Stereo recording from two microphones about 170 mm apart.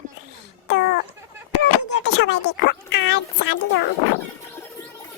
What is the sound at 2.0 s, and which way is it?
Speech, 90° left.